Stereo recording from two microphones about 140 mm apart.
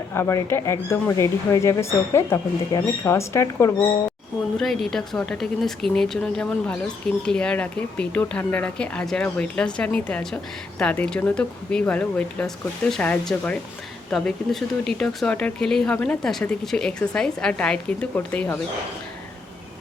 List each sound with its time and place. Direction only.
0.1 s speech: 20° left (ahead or behind)
4.5 s speech: centre (ahead or behind)